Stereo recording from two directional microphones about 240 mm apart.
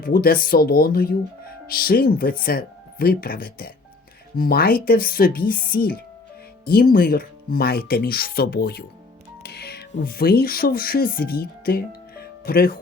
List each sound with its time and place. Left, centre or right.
0.0 s speech: left
9.4 s music: left
9.9 s speech: left
12.1 s music: left